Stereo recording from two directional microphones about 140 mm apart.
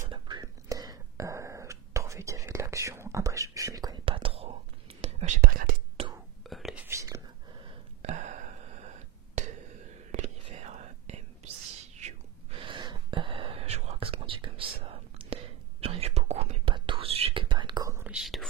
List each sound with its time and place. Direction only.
0.1 s whispering: 30° right (ahead or behind)
4.0 s whispering: 40° right (ahead or behind)
5.4 s whispering: 90° right
6.4 s whispering: centre (ahead or behind)
6.8 s whispering: 20° right (ahead or behind)
8.0 s a sound: 60° right (ahead or behind)
10.6 s whispering: 50° right (ahead or behind); by 17.9 s 30° right (ahead or behind)
18.1 s whispering: centre (ahead or behind)